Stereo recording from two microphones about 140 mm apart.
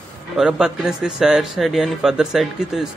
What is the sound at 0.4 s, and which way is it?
A man's voice, 5° right (ahead or behind).